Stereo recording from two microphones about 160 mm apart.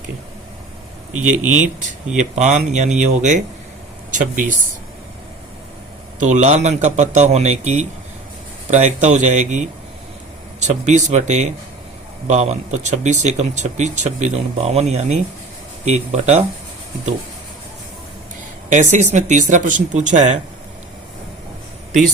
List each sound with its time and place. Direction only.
2.3 s speech: 45° right (ahead or behind)
6.1 s speech: 50° right (ahead or behind)
18.7 s speech: 50° right (ahead or behind)